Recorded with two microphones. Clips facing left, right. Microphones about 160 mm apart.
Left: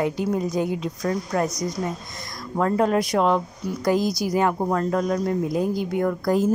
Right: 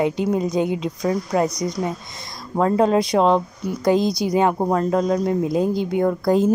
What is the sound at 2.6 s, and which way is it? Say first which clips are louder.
A woman's voice: right 3 dB; 20° right (ahead or behind).